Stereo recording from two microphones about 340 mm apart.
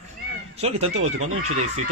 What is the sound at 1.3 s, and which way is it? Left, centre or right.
Speech, right.